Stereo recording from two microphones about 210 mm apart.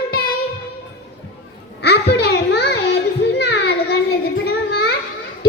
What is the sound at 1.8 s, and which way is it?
Music, 50° left (ahead or behind).